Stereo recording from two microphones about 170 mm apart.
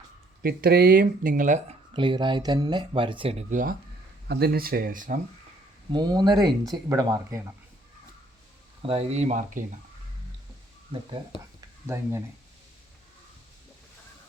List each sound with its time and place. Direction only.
0.4 s speech: 65° right (ahead or behind); by 1.7 s 45° right (ahead or behind)
1.9 s speech: 30° right (ahead or behind); by 3.8 s 50° right (ahead or behind)
4.3 s speech: 70° right (ahead or behind); by 5.2 s 55° right (ahead or behind)
5.9 s speech: 25° right (ahead or behind)
8.8 s speech: 35° right (ahead or behind)
11.3 s speech: 30° left (ahead or behind)
11.9 s speech: 15° right (ahead or behind)